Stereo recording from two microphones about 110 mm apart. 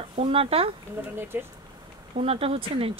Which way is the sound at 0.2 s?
60° right (ahead or behind).